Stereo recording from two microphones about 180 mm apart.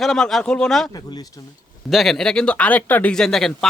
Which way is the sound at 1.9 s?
Centre (ahead or behind).